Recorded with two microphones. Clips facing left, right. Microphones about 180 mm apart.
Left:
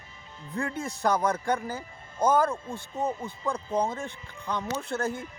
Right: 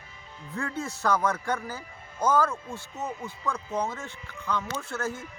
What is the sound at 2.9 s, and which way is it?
Speech, 35° left (ahead or behind).